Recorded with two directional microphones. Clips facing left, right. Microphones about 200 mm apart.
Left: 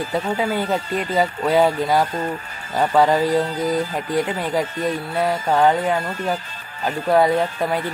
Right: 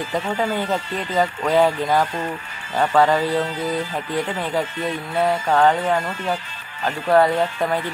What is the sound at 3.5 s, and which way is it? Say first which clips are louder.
Music: left 3 dB; 40° left (ahead or behind).